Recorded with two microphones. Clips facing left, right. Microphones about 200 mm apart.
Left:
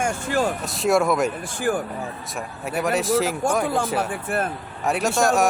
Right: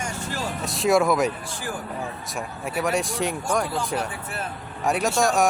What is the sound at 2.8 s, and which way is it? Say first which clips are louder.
Speech: left 4 dB; centre (ahead or behind).